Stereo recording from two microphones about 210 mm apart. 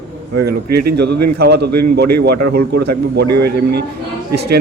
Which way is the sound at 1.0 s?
50° right (ahead or behind).